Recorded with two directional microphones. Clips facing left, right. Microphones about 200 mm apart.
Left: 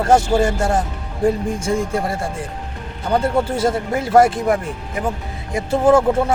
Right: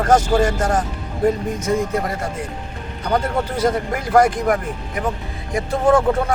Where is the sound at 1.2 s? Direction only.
30° left (ahead or behind).